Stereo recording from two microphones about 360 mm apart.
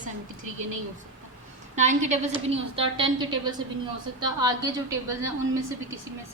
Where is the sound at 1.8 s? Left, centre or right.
Centre.